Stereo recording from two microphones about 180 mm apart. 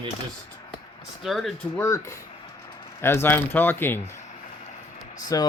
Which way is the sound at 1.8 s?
15° left (ahead or behind).